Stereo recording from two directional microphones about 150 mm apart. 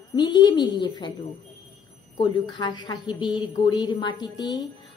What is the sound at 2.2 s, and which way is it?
A woman's voice, 30° left (ahead or behind).